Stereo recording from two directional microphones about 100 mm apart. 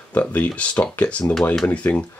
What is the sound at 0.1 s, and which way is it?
Speech, 15° left (ahead or behind).